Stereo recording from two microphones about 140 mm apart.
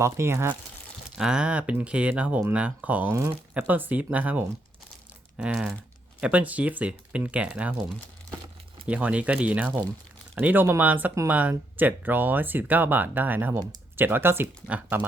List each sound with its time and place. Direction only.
0.0 s speech: 20° right (ahead or behind)
1.1 s speech: 5° right (ahead or behind)
8.9 s speech: 10° right (ahead or behind)